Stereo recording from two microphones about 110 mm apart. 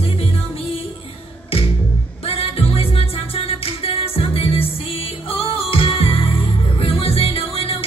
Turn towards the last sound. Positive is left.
turn(degrees=60)  # may be behind; listen again after turning